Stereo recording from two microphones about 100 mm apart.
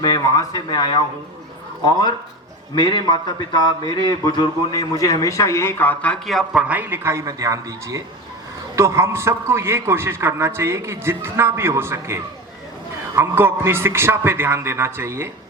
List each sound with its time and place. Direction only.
0.0 s a man's voice: 40° left (ahead or behind)
2.7 s a man's voice: 50° left (ahead or behind); by 6.1 s 15° left (ahead or behind)
6.2 s a man's voice: centre (ahead or behind)
6.6 s a man's voice: 15° right (ahead or behind)